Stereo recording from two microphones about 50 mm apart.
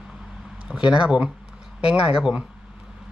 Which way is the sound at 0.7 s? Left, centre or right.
Centre.